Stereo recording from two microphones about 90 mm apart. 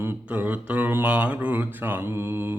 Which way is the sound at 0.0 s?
20° right (ahead or behind).